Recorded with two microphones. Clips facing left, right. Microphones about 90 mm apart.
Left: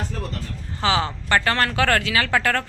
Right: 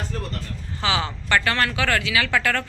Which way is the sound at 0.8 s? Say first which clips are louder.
Left 3 dB; 35° left (ahead or behind).